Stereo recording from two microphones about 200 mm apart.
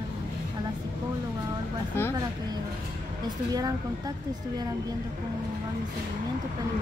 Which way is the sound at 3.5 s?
20° right (ahead or behind).